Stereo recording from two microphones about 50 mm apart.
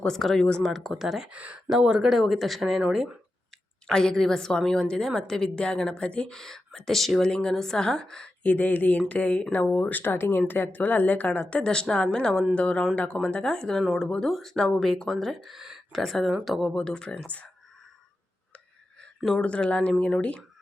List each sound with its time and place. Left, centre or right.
0.1 s a woman's voice: centre
1.3 s speech: right
1.7 s speech: centre
3.8 s a woman's voice: centre
6.4 s a woman's voice: centre
8.4 s a woman's voice: left; by 14.3 s centre
14.3 s speech: centre
15.5 s speech: centre
15.9 s speech: centre
16.6 s speech: centre
19.4 s speech: left